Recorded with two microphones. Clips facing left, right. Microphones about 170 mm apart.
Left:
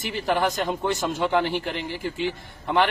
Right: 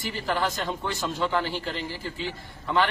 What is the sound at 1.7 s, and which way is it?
A man's voice, 15° left (ahead or behind).